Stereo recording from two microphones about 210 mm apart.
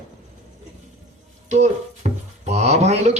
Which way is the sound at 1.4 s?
35° right (ahead or behind).